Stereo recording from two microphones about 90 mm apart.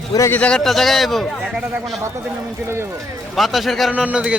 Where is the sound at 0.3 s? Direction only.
20° left (ahead or behind).